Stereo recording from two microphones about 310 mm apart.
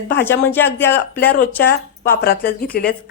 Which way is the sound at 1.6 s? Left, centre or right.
Left.